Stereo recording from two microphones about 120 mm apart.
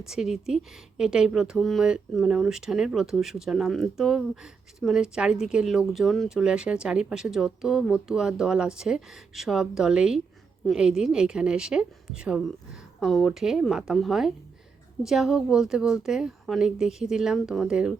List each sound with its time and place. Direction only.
0.0 s speech: 5° right (ahead or behind)